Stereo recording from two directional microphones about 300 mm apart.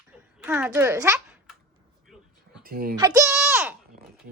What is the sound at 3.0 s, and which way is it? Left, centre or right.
Speech, centre.